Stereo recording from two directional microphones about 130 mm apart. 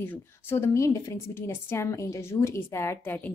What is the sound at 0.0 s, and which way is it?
A woman's voice, 15° left (ahead or behind).